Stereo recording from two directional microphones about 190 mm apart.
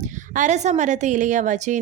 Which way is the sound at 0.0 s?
40° right (ahead or behind).